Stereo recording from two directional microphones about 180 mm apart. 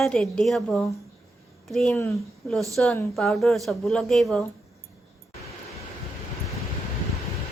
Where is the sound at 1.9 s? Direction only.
15° left (ahead or behind).